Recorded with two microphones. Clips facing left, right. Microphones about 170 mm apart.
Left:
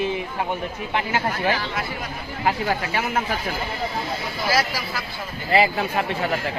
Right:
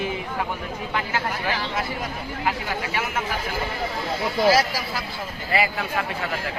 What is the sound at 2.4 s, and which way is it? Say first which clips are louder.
Speech: left 5 dB; 40° left (ahead or behind).